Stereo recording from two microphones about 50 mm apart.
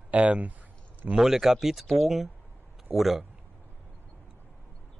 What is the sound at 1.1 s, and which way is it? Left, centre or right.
Speech, centre.